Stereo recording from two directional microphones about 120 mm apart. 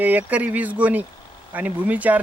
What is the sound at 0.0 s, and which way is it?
Speech, 15° right (ahead or behind).